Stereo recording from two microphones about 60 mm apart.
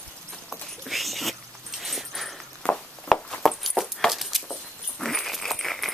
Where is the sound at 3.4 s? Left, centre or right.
Centre.